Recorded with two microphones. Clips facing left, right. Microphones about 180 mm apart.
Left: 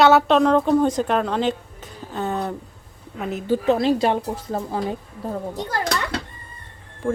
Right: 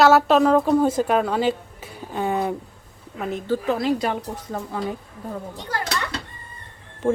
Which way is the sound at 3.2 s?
Centre (ahead or behind).